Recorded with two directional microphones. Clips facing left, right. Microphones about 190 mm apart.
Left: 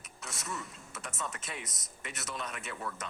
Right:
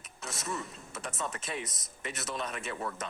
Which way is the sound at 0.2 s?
35° right (ahead or behind).